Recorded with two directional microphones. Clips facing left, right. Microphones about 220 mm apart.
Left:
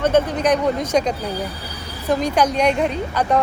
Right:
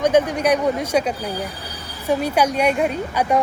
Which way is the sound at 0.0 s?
15° right (ahead or behind).